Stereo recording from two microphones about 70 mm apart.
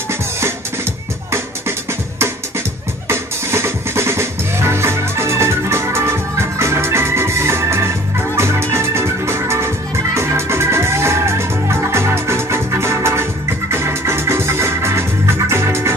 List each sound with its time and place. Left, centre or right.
3.1 s music: right